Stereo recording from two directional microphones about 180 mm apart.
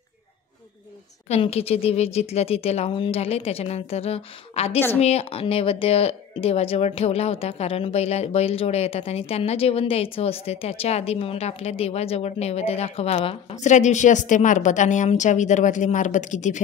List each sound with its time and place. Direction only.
1.3 s speech: 35° left (ahead or behind)